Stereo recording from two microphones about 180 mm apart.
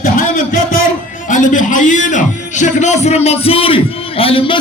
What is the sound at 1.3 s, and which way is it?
A man's voice, 45° left (ahead or behind).